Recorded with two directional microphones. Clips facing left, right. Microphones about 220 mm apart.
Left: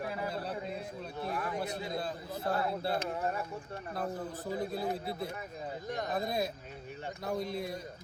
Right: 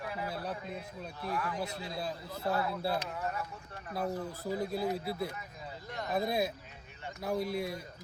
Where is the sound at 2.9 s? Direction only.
30° left (ahead or behind).